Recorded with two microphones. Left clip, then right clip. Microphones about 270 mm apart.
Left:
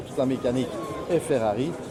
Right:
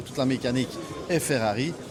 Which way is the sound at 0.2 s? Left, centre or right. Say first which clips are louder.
Left 2 dB; right.